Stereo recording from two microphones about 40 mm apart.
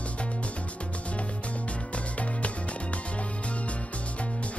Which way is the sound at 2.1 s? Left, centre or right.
Left.